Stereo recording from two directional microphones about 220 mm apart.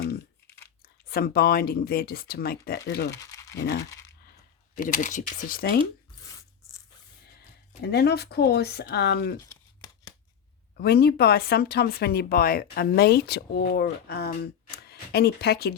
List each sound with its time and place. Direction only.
1.1 s speech: 45° left (ahead or behind)
3.1 s speech: 15° left (ahead or behind)
3.5 s speech: 55° left (ahead or behind)
4.2 s speech: 40° left (ahead or behind)
7.8 s speech: 50° left (ahead or behind)
9.4 s tearing: 15° left (ahead or behind)
10.8 s speech: 45° left (ahead or behind)